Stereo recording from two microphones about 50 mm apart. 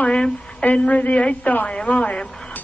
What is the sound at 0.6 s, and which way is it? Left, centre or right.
Speech, left.